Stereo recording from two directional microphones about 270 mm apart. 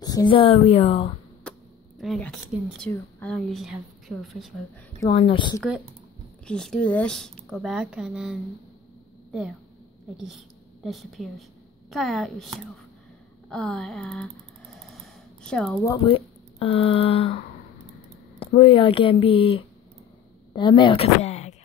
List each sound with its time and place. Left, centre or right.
0.0 s speech: centre
1.5 s a sound: centre
2.0 s speech: centre
5.0 s speech: centre
6.4 s speech: centre
10.1 s a woman's voice: centre
13.5 s speech: centre
14.8 s a sound: centre
15.9 s speech: centre
18.4 s speech: centre